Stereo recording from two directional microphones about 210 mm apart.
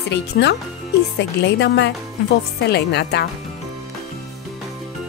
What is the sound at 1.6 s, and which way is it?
Speech, 55° left (ahead or behind).